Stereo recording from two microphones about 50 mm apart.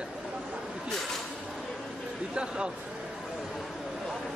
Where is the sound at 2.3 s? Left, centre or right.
Centre.